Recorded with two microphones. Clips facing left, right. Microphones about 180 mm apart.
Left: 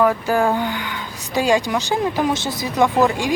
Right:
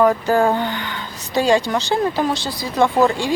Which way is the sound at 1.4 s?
10° left (ahead or behind).